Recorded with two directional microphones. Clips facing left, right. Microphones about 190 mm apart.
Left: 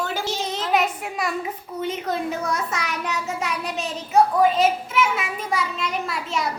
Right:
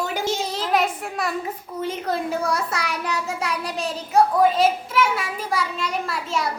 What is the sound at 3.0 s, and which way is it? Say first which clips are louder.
Speech: even; 5° left (ahead or behind).